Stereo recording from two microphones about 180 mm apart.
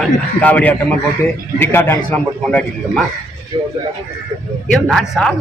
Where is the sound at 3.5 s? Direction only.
25° right (ahead or behind).